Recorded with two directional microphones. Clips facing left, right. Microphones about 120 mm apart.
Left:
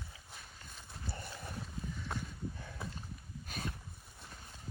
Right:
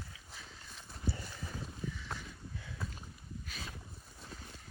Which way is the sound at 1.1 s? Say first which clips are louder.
Even; 55° left (ahead or behind).